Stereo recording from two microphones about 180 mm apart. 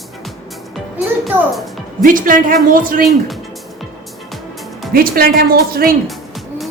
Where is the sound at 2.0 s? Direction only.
50° right (ahead or behind).